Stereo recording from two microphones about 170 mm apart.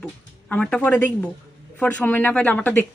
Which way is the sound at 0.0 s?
5° left (ahead or behind).